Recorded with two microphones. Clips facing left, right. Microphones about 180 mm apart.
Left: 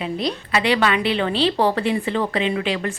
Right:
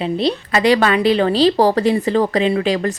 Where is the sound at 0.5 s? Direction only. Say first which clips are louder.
Right 4 dB; 40° right (ahead or behind).